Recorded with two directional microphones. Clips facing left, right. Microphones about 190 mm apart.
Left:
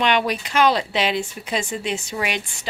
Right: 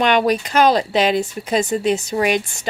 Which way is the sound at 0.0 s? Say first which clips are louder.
Right 5 dB; 45° right (ahead or behind).